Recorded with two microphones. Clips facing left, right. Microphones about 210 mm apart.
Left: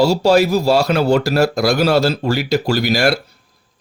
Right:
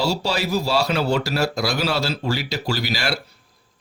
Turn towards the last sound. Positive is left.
turn(degrees=50)  # may be behind; listen again after turning